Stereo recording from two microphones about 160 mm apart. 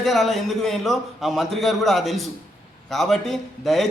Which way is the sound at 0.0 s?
Centre (ahead or behind).